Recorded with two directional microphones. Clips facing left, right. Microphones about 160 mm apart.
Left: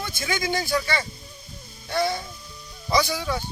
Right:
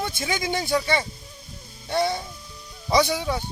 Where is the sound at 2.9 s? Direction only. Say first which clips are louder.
Right 2 dB; 25° right (ahead or behind).